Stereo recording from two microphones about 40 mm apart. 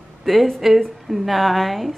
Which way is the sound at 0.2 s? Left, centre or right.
Centre.